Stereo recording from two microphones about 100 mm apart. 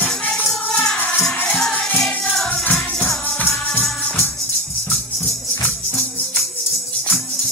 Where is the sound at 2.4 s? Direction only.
15° left (ahead or behind).